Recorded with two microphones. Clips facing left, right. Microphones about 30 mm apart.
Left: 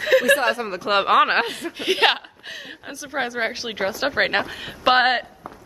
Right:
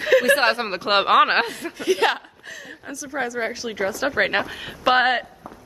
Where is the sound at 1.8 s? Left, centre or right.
Left.